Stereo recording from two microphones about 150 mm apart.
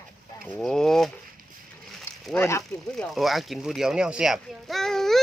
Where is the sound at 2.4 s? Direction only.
20° left (ahead or behind).